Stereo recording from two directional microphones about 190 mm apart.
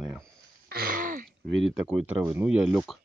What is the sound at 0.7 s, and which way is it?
Throat clearing, 50° right (ahead or behind).